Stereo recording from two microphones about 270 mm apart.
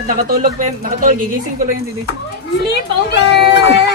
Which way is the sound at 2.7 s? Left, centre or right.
Left.